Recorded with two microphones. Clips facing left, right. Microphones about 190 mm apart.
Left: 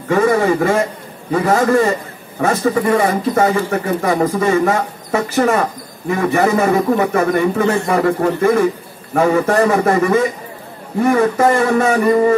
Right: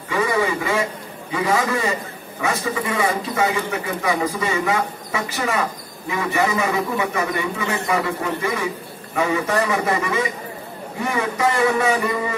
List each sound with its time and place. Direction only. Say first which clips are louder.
0.1 s a man's voice: left 7 dB; 50° left (ahead or behind)